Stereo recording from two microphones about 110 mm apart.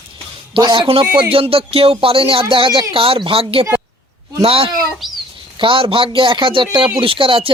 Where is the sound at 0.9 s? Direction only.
60° right (ahead or behind).